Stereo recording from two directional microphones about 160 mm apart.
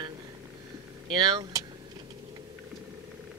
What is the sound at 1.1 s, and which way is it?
Speech, 25° right (ahead or behind).